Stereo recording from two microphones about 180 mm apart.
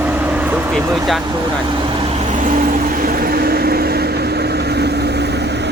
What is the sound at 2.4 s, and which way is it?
Vehicle, 45° right (ahead or behind).